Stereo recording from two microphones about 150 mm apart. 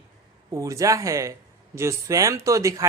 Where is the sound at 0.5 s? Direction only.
20° right (ahead or behind).